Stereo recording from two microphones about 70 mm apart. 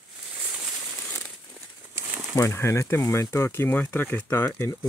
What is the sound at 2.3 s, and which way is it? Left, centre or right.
Speech, left.